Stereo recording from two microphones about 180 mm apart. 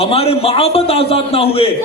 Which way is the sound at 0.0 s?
35° left (ahead or behind).